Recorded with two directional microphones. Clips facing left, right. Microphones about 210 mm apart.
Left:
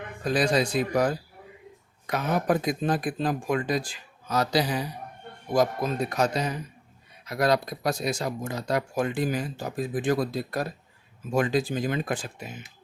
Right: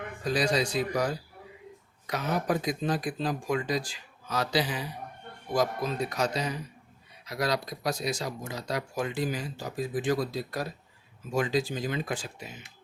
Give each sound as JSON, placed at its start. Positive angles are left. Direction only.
{"t": 0.3, "sound": "speech", "side_deg": 55}